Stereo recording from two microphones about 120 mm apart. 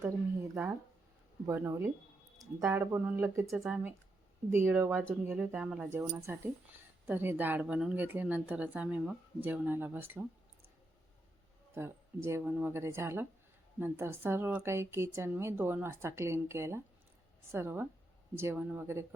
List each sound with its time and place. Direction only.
1.5 s a woman's voice: 20° right (ahead or behind)
3.5 s speech: centre (ahead or behind)
4.4 s speech: 20° right (ahead or behind)
5.9 s a woman's voice: 20° right (ahead or behind)
11.7 s a woman's voice: 20° right (ahead or behind)